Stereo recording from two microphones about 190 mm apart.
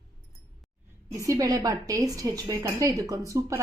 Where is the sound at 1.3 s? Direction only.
20° right (ahead or behind).